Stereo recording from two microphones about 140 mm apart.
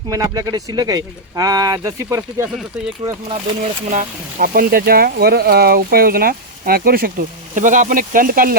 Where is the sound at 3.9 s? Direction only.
80° right.